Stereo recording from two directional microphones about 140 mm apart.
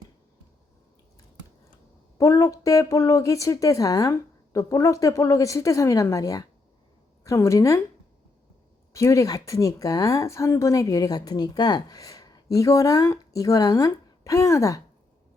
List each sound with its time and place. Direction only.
2.1 s a woman's voice: 20° left (ahead or behind)
8.9 s a woman's voice: 20° left (ahead or behind)